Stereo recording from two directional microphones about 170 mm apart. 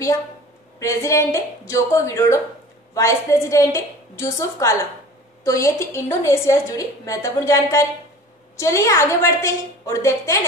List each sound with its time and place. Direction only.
0.7 s a woman's voice: 15° left (ahead or behind)